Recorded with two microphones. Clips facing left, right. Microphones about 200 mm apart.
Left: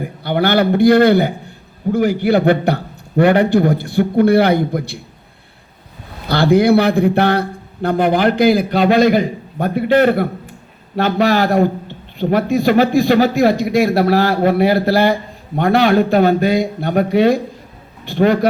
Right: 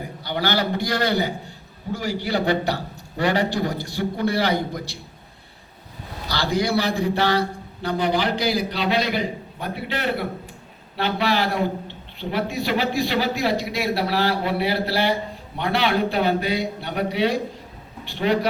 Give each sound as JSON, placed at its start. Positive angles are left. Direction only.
{"t": 0.0, "sound": "a man's voice", "side_deg": 55}
{"t": 6.2, "sound": "a man's voice", "side_deg": 55}